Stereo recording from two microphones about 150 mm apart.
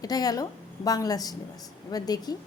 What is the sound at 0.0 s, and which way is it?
A woman's voice, 25° left (ahead or behind).